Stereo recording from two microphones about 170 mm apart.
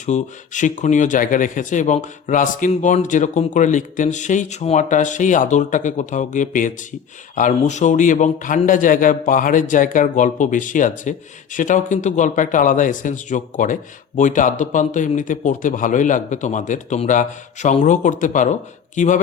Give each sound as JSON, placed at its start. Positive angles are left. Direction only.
{"t": 0.0, "sound": "speech", "side_deg": 45}